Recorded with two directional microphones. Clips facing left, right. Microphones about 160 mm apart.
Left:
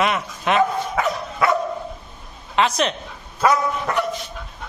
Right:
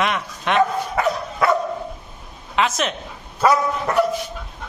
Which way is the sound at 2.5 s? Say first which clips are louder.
Left 1 dB; centre (ahead or behind).